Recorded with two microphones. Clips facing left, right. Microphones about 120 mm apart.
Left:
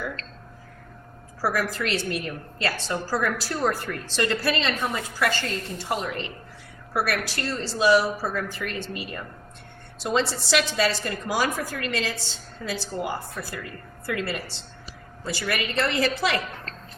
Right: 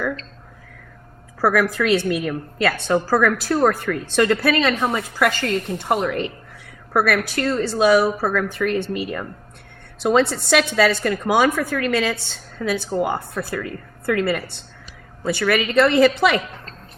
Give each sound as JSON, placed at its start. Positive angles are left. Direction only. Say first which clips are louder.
{"t": 1.4, "sound": "a woman's voice", "louder": "right 8 dB", "side_deg": -60}
{"t": 15.2, "sound": "speech", "louder": "right 9 dB", "side_deg": -75}